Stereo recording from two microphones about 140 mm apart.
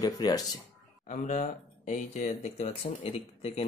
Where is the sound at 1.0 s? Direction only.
65° left (ahead or behind).